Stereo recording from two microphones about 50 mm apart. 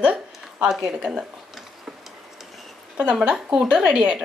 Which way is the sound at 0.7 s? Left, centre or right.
Centre.